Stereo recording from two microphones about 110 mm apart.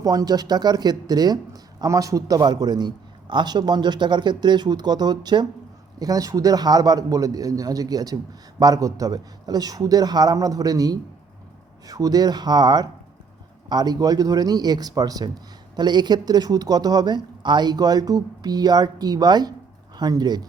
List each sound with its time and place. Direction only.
0.0 s speech: 35° right (ahead or behind)